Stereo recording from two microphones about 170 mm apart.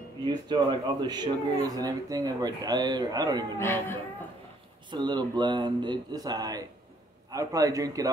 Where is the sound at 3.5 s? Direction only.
15° left (ahead or behind).